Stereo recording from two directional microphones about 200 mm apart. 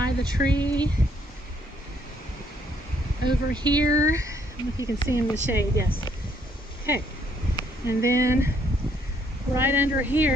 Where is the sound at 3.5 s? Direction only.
20° right (ahead or behind).